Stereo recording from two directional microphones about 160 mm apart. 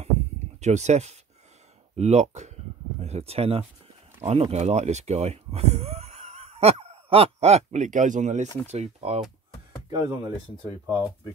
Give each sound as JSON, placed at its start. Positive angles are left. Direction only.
{"t": 0.6, "sound": "speech", "side_deg": -45}
{"t": 9.8, "sound": "speech", "side_deg": -25}
{"t": 10.9, "sound": "speech", "side_deg": -10}